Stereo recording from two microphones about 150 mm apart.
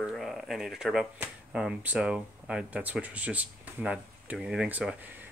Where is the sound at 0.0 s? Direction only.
Centre (ahead or behind).